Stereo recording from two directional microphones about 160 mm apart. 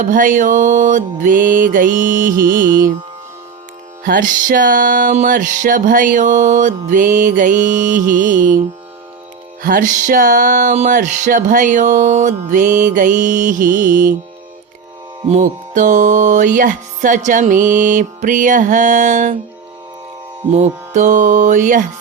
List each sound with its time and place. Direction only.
0.0 s music: 55° right (ahead or behind)
4.0 s music: 55° right (ahead or behind)
15.3 s music: 50° right (ahead or behind)
20.5 s music: 45° right (ahead or behind)